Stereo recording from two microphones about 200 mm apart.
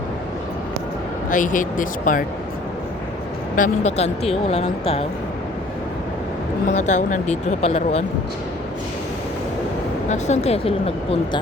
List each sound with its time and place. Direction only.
1.3 s speech: 40° left (ahead or behind)
3.5 s speech: 35° left (ahead or behind)
6.7 s speech: 35° left (ahead or behind)
10.1 s speech: 35° left (ahead or behind)